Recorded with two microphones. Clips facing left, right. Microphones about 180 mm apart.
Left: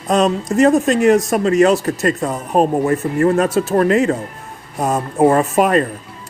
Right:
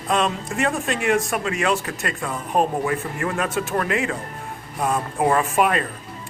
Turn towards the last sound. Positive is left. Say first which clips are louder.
# left 6 dB
turn(degrees=40)  # may be behind; listen again after turning